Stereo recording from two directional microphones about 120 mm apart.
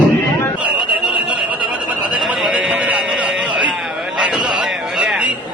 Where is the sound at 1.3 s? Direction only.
10° right (ahead or behind).